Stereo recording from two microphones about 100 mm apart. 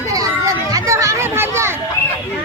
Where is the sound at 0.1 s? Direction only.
35° right (ahead or behind).